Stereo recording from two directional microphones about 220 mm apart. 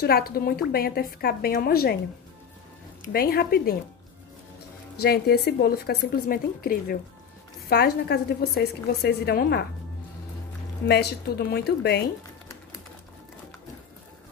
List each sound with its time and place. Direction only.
0.0 s speech: 45° left (ahead or behind)
3.1 s speech: 45° left (ahead or behind)
4.9 s speech: 45° left (ahead or behind)
10.9 s speech: 50° left (ahead or behind)